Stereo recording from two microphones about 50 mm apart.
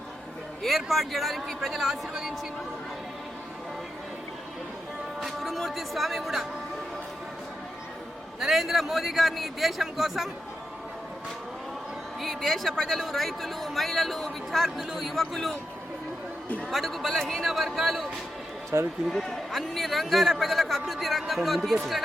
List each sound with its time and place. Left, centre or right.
0.9 s a man's voice: centre
5.2 s speech: centre
8.4 s a man's voice: centre
12.2 s a man's voice: centre
16.7 s a man's voice: centre
18.7 s speech: right
19.1 s a man's voice: centre